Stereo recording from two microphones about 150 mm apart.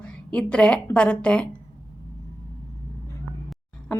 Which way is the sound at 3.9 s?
10° left (ahead or behind).